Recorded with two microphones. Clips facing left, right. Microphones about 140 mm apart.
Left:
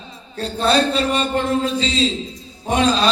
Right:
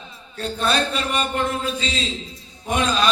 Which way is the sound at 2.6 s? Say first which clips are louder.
Left 4 dB; 35° left (ahead or behind).